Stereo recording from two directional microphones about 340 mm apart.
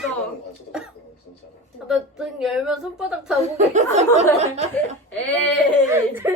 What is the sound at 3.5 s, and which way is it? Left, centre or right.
Speech, centre.